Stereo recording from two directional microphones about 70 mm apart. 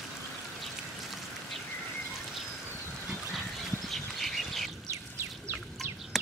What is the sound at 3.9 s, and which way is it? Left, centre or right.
Bird, centre.